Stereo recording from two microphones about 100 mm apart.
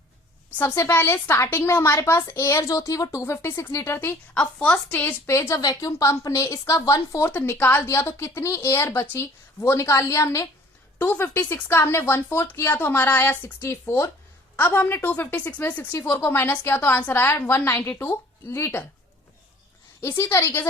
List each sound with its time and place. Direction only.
0.6 s a woman's voice: 25° left (ahead or behind)
4.4 s a woman's voice: 10° left (ahead or behind); by 7.3 s 30° left (ahead or behind)
7.3 s a woman's voice: 20° left (ahead or behind)
10.9 s a woman's voice: 15° left (ahead or behind)
20.0 s a woman's voice: 25° left (ahead or behind)